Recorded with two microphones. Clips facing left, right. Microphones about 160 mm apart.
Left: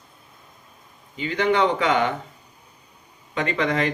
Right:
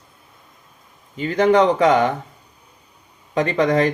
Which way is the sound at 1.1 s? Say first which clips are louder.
Right 6 dB; 40° right (ahead or behind).